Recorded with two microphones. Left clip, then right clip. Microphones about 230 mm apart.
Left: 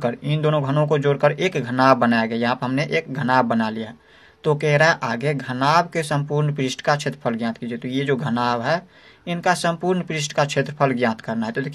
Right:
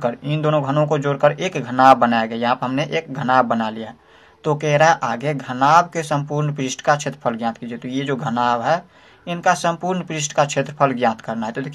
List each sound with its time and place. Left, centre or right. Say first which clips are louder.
0.0 s speech: right 1 dB; left